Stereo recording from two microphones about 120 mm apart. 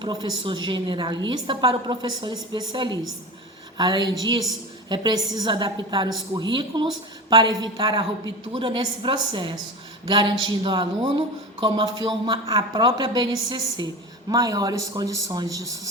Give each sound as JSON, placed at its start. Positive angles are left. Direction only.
{"t": 0.0, "sound": "a woman's voice", "side_deg": -35}